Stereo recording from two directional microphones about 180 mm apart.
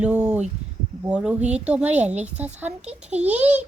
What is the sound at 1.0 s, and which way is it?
A woman's voice, 5° right (ahead or behind).